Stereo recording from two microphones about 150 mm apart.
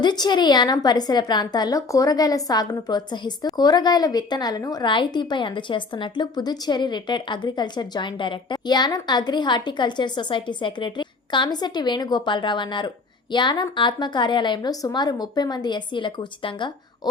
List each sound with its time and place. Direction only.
0.0 s a woman's voice: 30° left (ahead or behind)